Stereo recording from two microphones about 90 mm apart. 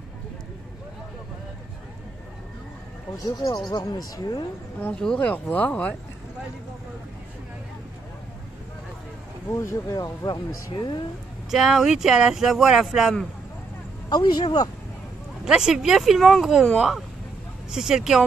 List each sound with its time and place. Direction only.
3.3 s speech: 50° left (ahead or behind)
5.2 s speech: 20° left (ahead or behind)
9.5 s speech: 30° left (ahead or behind)
9.9 s speech: 45° left (ahead or behind)
11.5 s speech: 5° right (ahead or behind)
14.0 s speech: 50° left (ahead or behind)
15.4 s speech: 5° right (ahead or behind)